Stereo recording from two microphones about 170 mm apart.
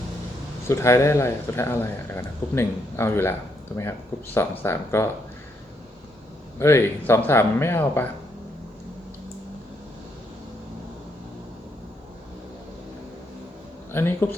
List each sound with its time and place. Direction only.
0.7 s speech: 15° left (ahead or behind)
6.6 s speech: 15° left (ahead or behind)
13.9 s speech: 15° left (ahead or behind)